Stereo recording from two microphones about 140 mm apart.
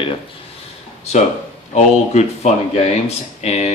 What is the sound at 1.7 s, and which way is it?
Speech, 55° left (ahead or behind).